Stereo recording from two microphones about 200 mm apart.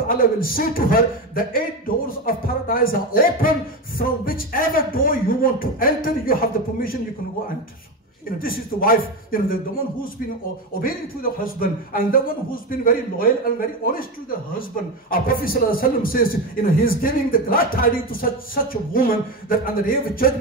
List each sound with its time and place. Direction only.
0.1 s a man's voice: 45° left (ahead or behind)
8.4 s a man's voice: 45° left (ahead or behind)
10.8 s a man's voice: 45° left (ahead or behind)
15.0 s a man's voice: 45° left (ahead or behind)